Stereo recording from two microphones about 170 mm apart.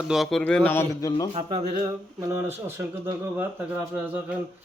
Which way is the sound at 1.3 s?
35° right (ahead or behind).